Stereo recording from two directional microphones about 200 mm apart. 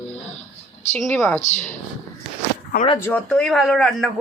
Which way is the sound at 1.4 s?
35° left (ahead or behind).